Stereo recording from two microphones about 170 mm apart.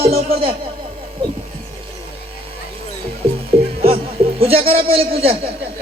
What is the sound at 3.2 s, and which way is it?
Music, 35° right (ahead or behind).